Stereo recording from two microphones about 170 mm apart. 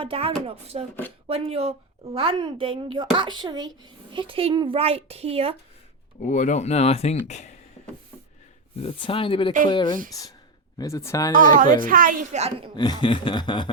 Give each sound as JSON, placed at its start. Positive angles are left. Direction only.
{"t": 0.0, "sound": "a woman's voice", "side_deg": -35}
{"t": 6.2, "sound": "speech", "side_deg": 45}
{"t": 8.8, "sound": "speech", "side_deg": 35}
{"t": 9.6, "sound": "snicker", "side_deg": 25}
{"t": 11.3, "sound": "a woman's voice", "side_deg": -50}
{"t": 12.7, "sound": "snicker", "side_deg": 25}